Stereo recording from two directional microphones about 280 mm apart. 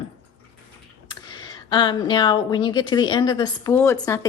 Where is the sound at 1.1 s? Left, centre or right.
Centre.